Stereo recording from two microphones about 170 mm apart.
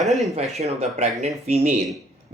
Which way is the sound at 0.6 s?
40° right (ahead or behind).